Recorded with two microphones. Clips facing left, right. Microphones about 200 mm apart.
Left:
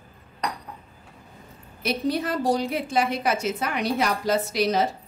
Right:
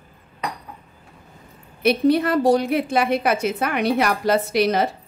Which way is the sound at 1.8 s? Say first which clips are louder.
Right 8 dB; 60° right (ahead or behind).